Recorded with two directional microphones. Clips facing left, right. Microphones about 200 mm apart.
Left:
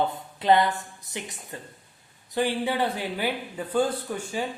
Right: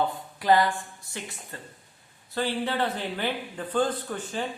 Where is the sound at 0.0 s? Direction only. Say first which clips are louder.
Left 1 dB; 20° left (ahead or behind).